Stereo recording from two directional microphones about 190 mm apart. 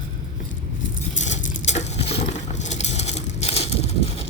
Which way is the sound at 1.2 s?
35° left (ahead or behind).